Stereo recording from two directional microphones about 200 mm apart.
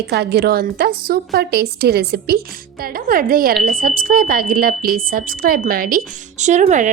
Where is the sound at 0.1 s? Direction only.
55° right (ahead or behind).